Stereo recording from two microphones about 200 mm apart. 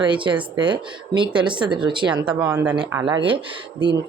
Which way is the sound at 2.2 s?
5° right (ahead or behind).